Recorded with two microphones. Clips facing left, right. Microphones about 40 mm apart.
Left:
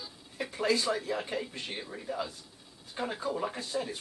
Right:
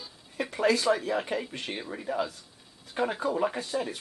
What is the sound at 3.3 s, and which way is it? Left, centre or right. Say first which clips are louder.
Speech: right 5 dB; right.